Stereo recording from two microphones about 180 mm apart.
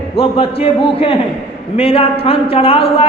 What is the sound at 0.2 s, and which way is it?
A man's voice, 30° left (ahead or behind).